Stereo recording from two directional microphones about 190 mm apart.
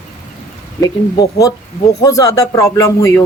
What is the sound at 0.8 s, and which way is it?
Speech, 20° left (ahead or behind).